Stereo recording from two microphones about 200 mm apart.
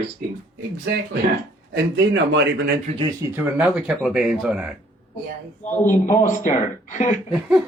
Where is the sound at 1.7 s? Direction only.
60° right (ahead or behind).